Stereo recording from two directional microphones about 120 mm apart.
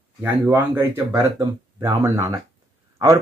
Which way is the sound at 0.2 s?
15° right (ahead or behind).